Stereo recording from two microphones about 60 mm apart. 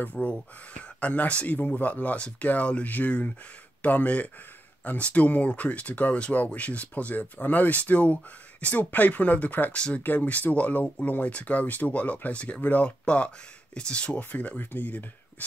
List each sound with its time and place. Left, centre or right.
0.0 s speech: left
9.8 s speech: centre
10.0 s speech: left